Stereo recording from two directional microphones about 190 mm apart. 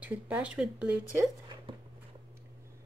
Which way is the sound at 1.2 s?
20° right (ahead or behind).